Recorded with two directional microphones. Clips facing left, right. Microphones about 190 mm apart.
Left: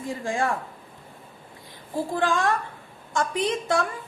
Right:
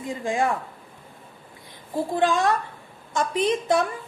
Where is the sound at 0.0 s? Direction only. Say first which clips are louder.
Right 2 dB; 20° right (ahead or behind).